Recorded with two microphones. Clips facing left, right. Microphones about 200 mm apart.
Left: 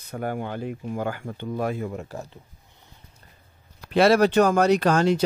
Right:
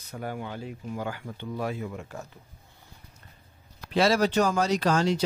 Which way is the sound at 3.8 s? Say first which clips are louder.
Left 5 dB; 60° left (ahead or behind).